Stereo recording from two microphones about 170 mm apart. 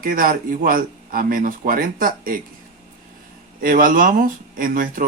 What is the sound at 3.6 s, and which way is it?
Speech, 55° right (ahead or behind).